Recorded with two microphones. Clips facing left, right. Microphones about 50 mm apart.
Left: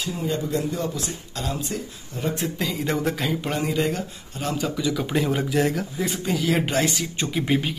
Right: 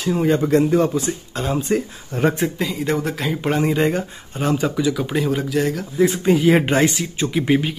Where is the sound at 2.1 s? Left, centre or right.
Right.